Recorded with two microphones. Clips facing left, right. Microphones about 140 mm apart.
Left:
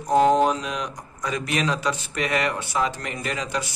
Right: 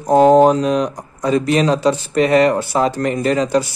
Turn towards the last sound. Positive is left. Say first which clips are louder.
# right 12 dB
turn(degrees=-35)  # may be behind; listen again after turning